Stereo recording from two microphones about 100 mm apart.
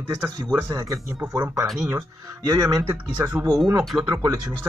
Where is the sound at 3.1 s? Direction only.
15° right (ahead or behind).